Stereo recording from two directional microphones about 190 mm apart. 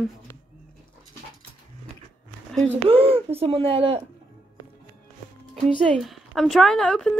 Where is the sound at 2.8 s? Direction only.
30° right (ahead or behind).